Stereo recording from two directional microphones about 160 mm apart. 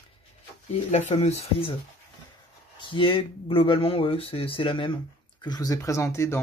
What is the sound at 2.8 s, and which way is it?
Speech, 30° left (ahead or behind).